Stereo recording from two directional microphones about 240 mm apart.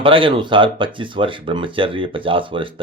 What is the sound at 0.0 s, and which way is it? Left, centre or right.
Speech, right.